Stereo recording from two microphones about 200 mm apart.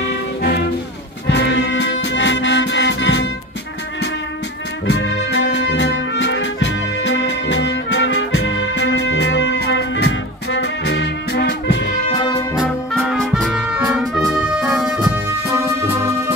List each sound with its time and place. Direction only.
1.2 s music: 60° left (ahead or behind)
4.8 s music: 60° left (ahead or behind)
12.1 s brass instrument: 20° left (ahead or behind)
13.3 s music: centre (ahead or behind)
15.0 s music: 25° right (ahead or behind)